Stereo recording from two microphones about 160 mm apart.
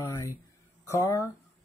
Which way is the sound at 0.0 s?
20° left (ahead or behind).